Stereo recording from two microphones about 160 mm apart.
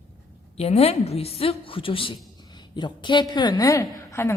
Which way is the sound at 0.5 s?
40° left (ahead or behind).